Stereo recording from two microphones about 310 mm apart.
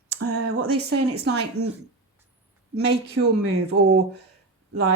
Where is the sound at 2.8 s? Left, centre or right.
Right.